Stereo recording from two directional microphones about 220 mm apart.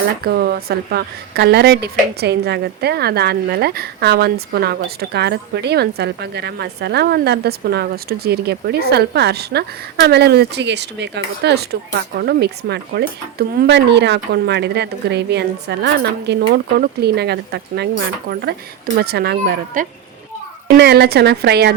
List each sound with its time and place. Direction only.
0.3 s speech: 45° right (ahead or behind)